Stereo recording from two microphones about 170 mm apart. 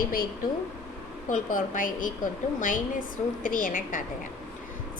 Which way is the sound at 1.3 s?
50° left (ahead or behind).